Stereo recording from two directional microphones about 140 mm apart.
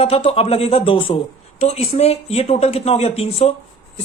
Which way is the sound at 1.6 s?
50° left (ahead or behind).